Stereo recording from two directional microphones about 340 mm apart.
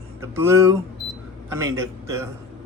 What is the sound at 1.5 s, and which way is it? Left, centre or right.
Speech, centre.